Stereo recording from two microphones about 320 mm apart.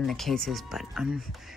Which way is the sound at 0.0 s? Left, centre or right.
Centre.